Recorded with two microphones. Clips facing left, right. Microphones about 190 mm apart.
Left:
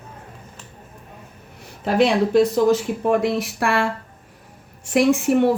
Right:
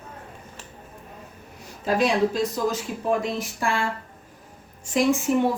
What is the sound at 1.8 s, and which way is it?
A woman's voice, 65° left (ahead or behind).